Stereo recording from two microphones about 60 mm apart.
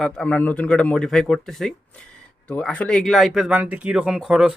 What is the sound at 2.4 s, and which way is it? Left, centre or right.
Speech, left.